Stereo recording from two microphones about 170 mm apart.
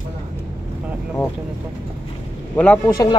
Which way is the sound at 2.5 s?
5° left (ahead or behind).